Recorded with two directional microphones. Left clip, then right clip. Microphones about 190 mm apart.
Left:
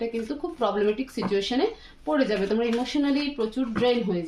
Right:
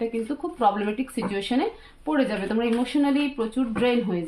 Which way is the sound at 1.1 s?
25° right (ahead or behind).